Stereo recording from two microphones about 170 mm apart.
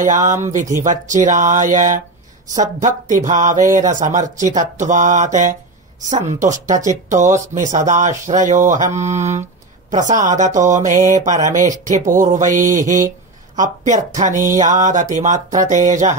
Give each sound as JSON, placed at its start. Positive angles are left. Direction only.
{"t": 0.0, "sound": "speech", "side_deg": -45}